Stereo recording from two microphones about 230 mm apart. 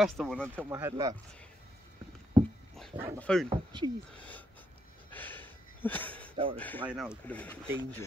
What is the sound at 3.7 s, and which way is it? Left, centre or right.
Speech, centre.